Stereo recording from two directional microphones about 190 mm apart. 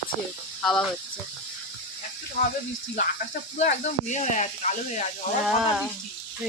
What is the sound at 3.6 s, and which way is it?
Speech, 40° left (ahead or behind).